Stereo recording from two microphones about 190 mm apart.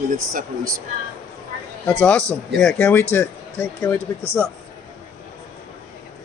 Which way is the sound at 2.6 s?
5° left (ahead or behind).